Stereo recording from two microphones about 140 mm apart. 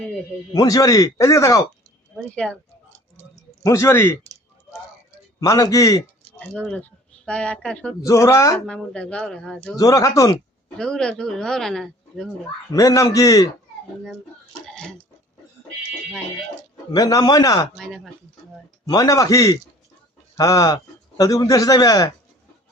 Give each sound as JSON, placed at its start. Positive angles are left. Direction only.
{"t": 0.5, "sound": "speech", "side_deg": 25}
{"t": 2.1, "sound": "speech", "side_deg": 10}
{"t": 3.6, "sound": "speech", "side_deg": 20}
{"t": 5.4, "sound": "speech", "side_deg": 25}
{"t": 6.4, "sound": "speech", "side_deg": 5}
{"t": 8.0, "sound": "speech", "side_deg": 20}
{"t": 8.6, "sound": "speech", "side_deg": 5}
{"t": 9.7, "sound": "speech", "side_deg": 25}
{"t": 10.8, "sound": "speech", "side_deg": 5}
{"t": 12.7, "sound": "speech", "side_deg": 25}
{"t": 14.7, "sound": "a sound", "side_deg": 5}
{"t": 16.9, "sound": "speech", "side_deg": 30}
{"t": 17.7, "sound": "speech", "side_deg": 0}
{"t": 18.9, "sound": "speech", "side_deg": 25}